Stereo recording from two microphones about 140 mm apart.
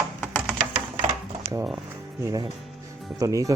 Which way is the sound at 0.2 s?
10° left (ahead or behind).